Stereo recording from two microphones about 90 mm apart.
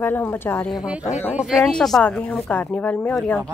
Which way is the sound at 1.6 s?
5° left (ahead or behind).